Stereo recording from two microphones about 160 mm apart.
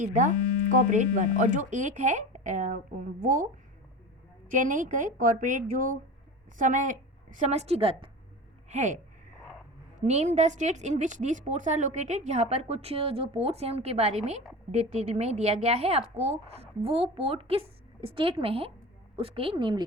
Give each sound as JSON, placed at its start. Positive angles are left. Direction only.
{"t": 0.0, "sound": "a woman's voice", "side_deg": -55}
{"t": 4.4, "sound": "a woman's voice", "side_deg": -55}
{"t": 8.7, "sound": "a sound", "side_deg": -50}
{"t": 10.0, "sound": "a woman's voice", "side_deg": -45}